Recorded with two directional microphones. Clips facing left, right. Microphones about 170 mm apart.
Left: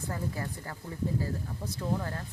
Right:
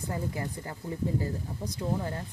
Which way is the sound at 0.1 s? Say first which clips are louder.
Right 2 dB; 20° right (ahead or behind).